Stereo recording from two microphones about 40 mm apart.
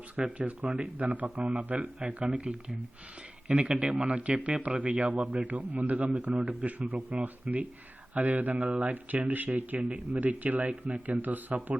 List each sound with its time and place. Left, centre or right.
0.3 s speech: right